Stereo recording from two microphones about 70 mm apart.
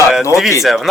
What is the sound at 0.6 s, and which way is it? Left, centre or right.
Speech, centre.